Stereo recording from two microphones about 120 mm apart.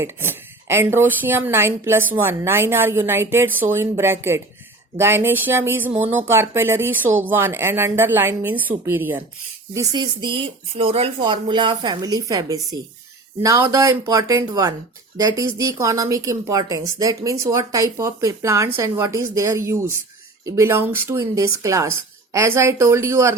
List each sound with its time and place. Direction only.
0.0 s speech: 20° right (ahead or behind)
9.7 s speech: 30° right (ahead or behind); by 11.3 s 50° right (ahead or behind)
11.3 s a woman's voice: 40° right (ahead or behind); by 23.4 s 20° right (ahead or behind)